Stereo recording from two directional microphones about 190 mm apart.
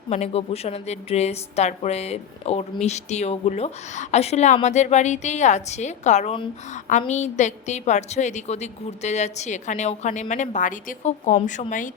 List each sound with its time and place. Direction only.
0.1 s a woman's voice: 35° left (ahead or behind)